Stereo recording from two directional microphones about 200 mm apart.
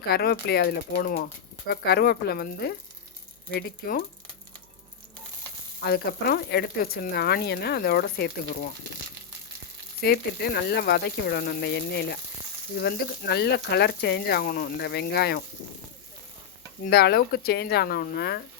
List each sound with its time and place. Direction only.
0.1 s speech: 50° left (ahead or behind)
5.8 s speech: 50° left (ahead or behind)
10.0 s speech: 50° left (ahead or behind)
16.8 s speech: 50° left (ahead or behind)